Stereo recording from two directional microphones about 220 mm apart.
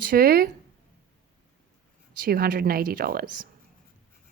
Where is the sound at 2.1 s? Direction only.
45° right (ahead or behind).